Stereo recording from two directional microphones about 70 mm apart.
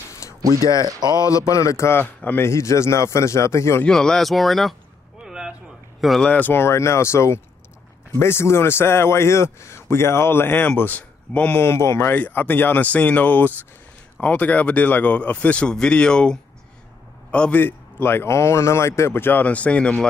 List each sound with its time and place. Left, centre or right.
0.4 s speech: right
1.1 s speech: left
2.0 s a man's voice: left
2.5 s speech: left
3.8 s speech: centre
5.2 s a sound: centre
5.9 s speech: centre
6.2 s a man's voice: left
11.5 s a man's voice: left
12.1 s a man's voice: left
17.6 s a man's voice: left